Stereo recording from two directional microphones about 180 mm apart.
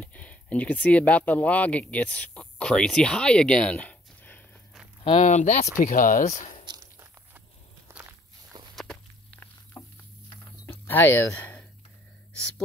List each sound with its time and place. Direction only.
0.0 s speech: 10° left (ahead or behind)
5.1 s speech: 40° left (ahead or behind)
6.6 s a sound: 15° right (ahead or behind)
7.9 s walk: 15° right (ahead or behind)
8.7 s walk: 5° left (ahead or behind)
10.7 s a sound: 10° left (ahead or behind)